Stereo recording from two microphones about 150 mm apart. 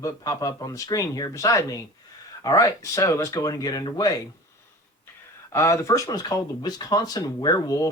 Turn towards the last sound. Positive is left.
turn(degrees=25)  # may be behind; listen again after turning